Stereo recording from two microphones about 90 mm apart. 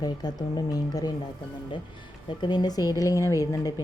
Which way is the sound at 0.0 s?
50° left (ahead or behind).